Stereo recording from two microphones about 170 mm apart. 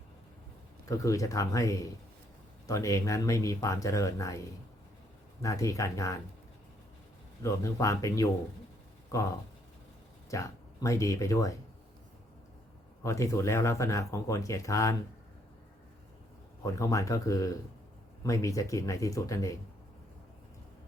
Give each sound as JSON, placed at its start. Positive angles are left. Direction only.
{"t": 0.9, "sound": "speech", "side_deg": 20}
{"t": 5.4, "sound": "speech", "side_deg": 20}
{"t": 7.4, "sound": "speech", "side_deg": 20}
{"t": 13.0, "sound": "speech", "side_deg": 15}
{"t": 16.6, "sound": "speech", "side_deg": 20}